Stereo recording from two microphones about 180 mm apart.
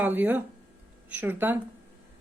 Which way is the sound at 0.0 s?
10° right (ahead or behind).